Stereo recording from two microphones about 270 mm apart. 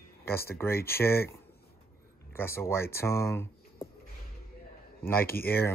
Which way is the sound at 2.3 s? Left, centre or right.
Centre.